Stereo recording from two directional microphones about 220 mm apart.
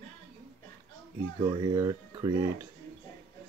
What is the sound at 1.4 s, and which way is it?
Speech, 15° right (ahead or behind).